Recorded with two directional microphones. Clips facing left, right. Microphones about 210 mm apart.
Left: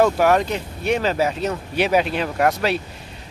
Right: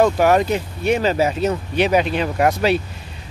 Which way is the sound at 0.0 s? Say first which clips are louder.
Right 2 dB; centre (ahead or behind).